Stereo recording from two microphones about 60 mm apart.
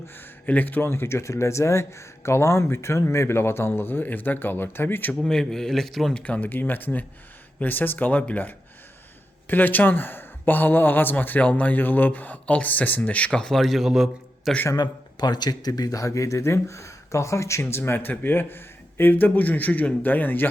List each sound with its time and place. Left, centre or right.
0.4 s speech: left
0.9 s speech: left
5.2 s speech: centre
6.1 s speech: left
6.5 s speech: left
13.5 s a man's voice: centre
15.4 s speech: left